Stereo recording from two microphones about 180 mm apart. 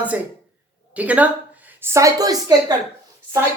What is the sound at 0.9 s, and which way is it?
A woman's voice, 10° right (ahead or behind).